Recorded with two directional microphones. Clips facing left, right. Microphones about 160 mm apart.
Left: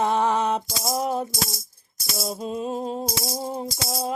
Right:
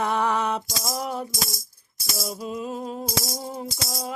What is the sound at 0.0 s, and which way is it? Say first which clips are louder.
Music: left 2 dB; 20° left (ahead or behind).